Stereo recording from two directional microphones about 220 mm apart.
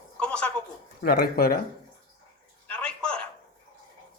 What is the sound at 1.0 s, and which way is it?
Speech, 45° left (ahead or behind).